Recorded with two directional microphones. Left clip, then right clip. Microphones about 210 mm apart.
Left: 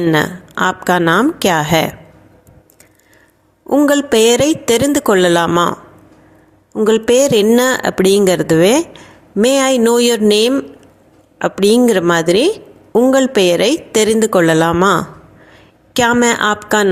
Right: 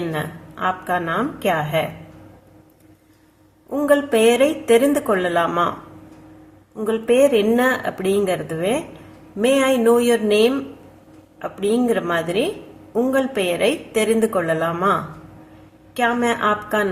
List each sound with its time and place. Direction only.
0.1 s speech: 50° left (ahead or behind)
3.7 s speech: 40° left (ahead or behind)
6.7 s speech: 45° left (ahead or behind)